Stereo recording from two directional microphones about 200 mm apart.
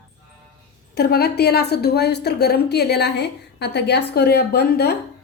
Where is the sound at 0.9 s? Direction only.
50° left (ahead or behind).